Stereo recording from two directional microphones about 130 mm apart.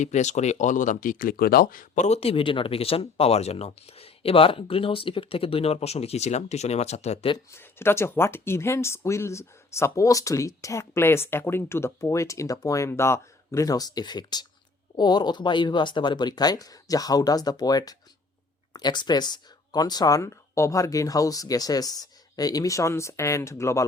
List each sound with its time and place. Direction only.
0.0 s speech: 65° left (ahead or behind)
7.5 s speech: 20° left (ahead or behind)